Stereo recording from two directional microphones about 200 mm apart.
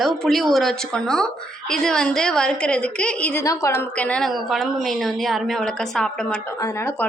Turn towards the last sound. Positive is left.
turn(degrees=10)  # may be behind; listen again after turning